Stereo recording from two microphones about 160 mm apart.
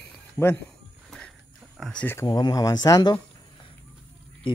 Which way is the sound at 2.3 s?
25° left (ahead or behind).